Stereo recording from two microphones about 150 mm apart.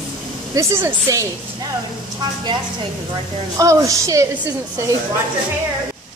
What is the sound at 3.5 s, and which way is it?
Speech, 20° right (ahead or behind).